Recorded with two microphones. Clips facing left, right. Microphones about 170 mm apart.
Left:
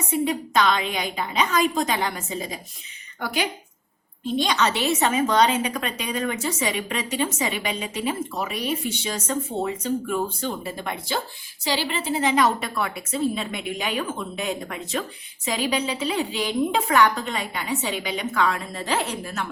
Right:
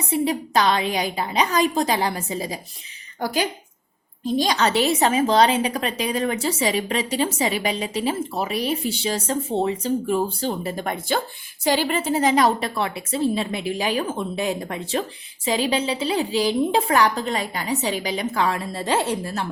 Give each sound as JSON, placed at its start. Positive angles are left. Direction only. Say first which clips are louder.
{"t": 0.1, "sound": "a woman's voice", "louder": "right 2 dB", "side_deg": -35}